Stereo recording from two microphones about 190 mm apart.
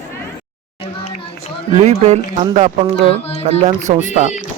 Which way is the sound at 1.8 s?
35° right (ahead or behind).